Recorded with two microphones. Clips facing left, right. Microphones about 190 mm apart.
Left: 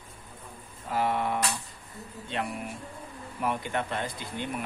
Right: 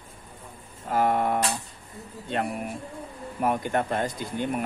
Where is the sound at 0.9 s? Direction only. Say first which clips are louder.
Right 4 dB; 45° right (ahead or behind).